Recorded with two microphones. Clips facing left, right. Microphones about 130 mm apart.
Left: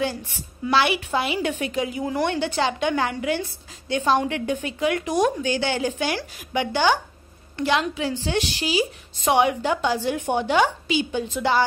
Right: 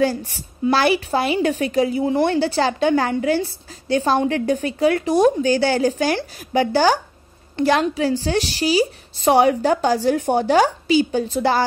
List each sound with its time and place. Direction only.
0.0 s a woman's voice: 40° right (ahead or behind)